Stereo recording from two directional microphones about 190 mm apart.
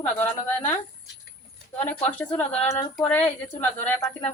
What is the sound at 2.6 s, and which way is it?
Female singing, 35° left (ahead or behind).